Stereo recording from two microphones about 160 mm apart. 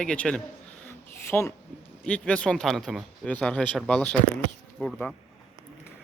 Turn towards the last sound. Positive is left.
turn(degrees=5)  # may be behind; listen again after turning